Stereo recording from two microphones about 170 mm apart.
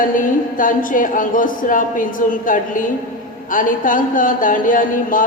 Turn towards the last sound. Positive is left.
turn(degrees=55)  # may be behind; listen again after turning